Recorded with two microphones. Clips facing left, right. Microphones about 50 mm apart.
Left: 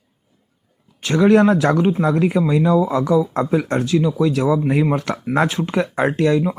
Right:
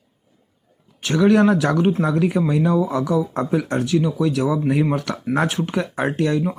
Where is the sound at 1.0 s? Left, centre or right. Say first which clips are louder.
Left 2 dB; left.